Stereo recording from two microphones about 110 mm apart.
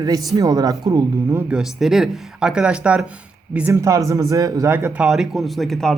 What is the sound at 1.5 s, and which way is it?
Speech, 5° right (ahead or behind).